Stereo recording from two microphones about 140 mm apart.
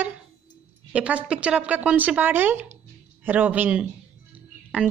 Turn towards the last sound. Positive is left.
turn(degrees=-10)  # may be behind; listen again after turning